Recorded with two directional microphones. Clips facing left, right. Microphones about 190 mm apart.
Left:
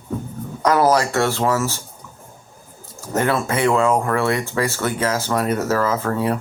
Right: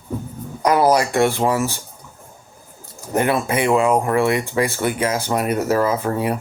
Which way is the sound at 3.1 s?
15° right (ahead or behind).